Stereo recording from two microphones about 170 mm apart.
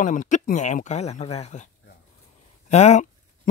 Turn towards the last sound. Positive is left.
turn(degrees=40)  # may be behind; listen again after turning